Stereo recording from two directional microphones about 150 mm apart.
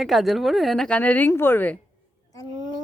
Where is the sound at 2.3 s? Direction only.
25° left (ahead or behind).